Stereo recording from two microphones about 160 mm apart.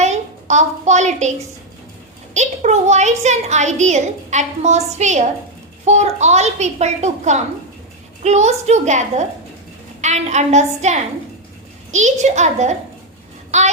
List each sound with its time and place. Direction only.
0.0 s a sound: 45° right (ahead or behind)
2.3 s a child's voice: 45° right (ahead or behind)
13.5 s child singing: 45° right (ahead or behind)